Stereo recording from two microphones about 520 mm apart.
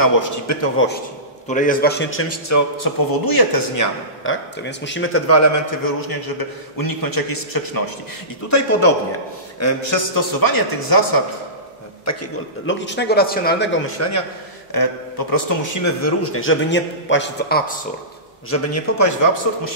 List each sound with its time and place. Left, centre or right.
0.0 s a man's voice: left
1.5 s a man's voice: centre; by 3.8 s left
4.2 s a man's voice: left
12.0 s a man's voice: left
14.7 s a man's voice: left
15.3 s a man's voice: left; by 17.7 s centre
18.5 s a man's voice: left